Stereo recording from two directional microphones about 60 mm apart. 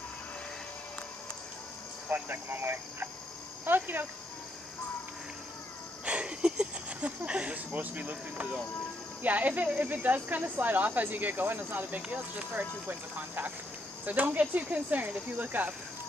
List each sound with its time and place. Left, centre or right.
2.0 s speech: right
6.0 s a sound: centre
9.2 s speech: right
14.0 s speech: right